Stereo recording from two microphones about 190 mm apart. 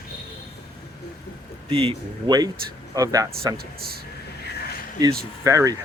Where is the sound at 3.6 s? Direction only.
55° right (ahead or behind).